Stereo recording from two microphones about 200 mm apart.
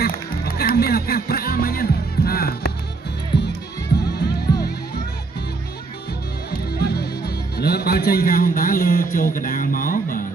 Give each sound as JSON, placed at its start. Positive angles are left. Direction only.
{"t": 0.0, "sound": "music", "side_deg": 50}
{"t": 4.0, "sound": "music", "side_deg": 55}
{"t": 6.8, "sound": "a man's voice", "side_deg": 55}